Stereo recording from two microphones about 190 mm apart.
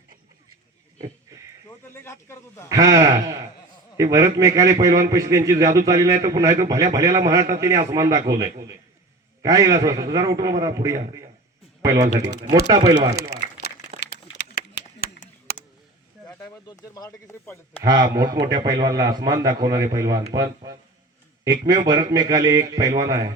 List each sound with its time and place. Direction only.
1.9 s speech: 15° left (ahead or behind)
2.6 s a man's voice: 15° right (ahead or behind)
13.3 s crumpling: 60° left (ahead or behind)
14.5 s a sound: 55° left (ahead or behind)
15.2 s a sound: 45° left (ahead or behind)
16.5 s speech: 20° left (ahead or behind)
17.8 s a man's voice: 20° right (ahead or behind)